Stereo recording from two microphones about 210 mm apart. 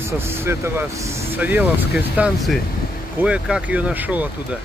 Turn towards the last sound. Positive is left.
turn(degrees=-5)  # may be behind; listen again after turning